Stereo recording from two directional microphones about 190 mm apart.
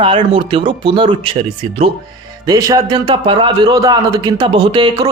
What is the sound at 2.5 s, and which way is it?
A man's voice, 20° right (ahead or behind).